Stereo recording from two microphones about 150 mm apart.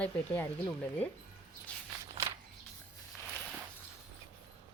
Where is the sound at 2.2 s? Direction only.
20° right (ahead or behind).